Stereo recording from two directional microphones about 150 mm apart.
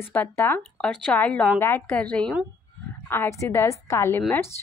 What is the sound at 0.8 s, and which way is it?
A woman's voice, 5° left (ahead or behind).